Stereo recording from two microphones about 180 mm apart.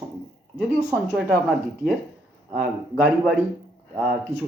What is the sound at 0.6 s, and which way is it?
Speech, 5° right (ahead or behind).